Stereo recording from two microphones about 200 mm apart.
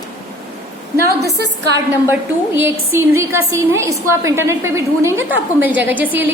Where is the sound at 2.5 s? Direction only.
10° right (ahead or behind).